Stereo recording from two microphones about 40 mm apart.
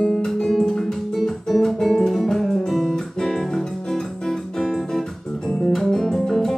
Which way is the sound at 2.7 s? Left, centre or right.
Centre.